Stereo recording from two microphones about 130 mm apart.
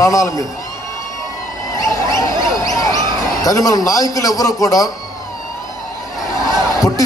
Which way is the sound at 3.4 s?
25° left (ahead or behind).